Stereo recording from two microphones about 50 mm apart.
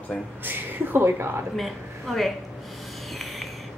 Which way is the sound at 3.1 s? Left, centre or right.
Centre.